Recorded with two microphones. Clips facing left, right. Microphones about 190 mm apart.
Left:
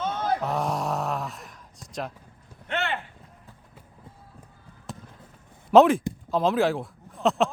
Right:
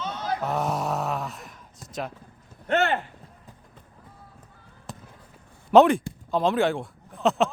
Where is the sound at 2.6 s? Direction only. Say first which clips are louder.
Right 6 dB; 45° right (ahead or behind).